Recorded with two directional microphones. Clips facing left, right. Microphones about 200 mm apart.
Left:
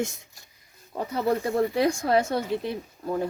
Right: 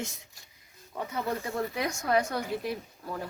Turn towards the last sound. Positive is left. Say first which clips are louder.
# left 9 dB
turn(degrees=20)  # may be behind; listen again after turning